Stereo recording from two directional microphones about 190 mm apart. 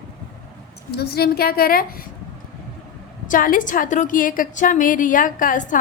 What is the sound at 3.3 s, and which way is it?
A woman's voice, 45° left (ahead or behind).